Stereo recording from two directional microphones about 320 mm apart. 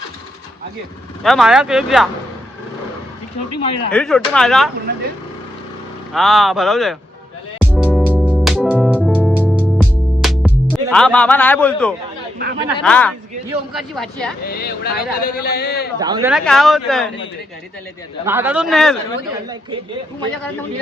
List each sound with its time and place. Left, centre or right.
1.2 s speech: centre
3.6 s speech: centre
3.9 s speech: centre
6.1 s speech: centre
7.6 s music: centre
12.6 s speech: centre
14.4 s speech: left
16.0 s speech: centre
16.3 s speech: centre
18.3 s speech: centre
19.5 s speech: centre